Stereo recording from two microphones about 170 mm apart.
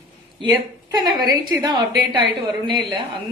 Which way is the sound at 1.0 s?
25° right (ahead or behind).